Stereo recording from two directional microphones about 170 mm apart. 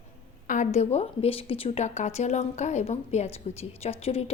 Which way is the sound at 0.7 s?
40° left (ahead or behind).